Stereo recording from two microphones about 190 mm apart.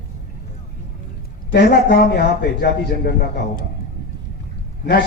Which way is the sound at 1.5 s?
60° left (ahead or behind).